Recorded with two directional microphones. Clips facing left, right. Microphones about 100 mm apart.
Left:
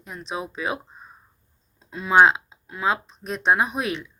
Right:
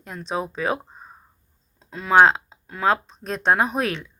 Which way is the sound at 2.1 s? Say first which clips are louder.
Right 1 dB; 40° right (ahead or behind).